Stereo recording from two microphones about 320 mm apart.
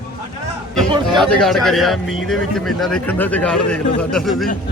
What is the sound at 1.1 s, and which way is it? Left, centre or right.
A man's voice, centre.